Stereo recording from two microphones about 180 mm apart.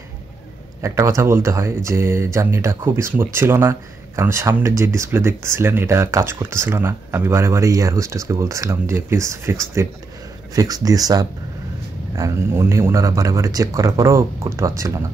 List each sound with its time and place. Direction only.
0.8 s speech: 15° right (ahead or behind)